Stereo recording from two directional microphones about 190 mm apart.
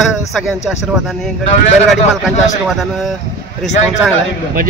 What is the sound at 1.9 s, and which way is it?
Speech, centre (ahead or behind).